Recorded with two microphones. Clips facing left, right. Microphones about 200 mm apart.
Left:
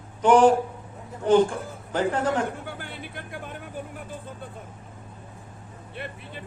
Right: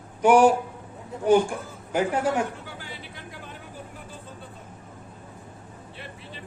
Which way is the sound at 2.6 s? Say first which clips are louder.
Left 3 dB; 55° left (ahead or behind).